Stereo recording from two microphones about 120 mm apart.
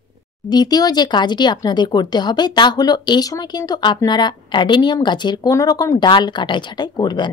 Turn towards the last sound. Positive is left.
turn(degrees=40)  # may be behind; listen again after turning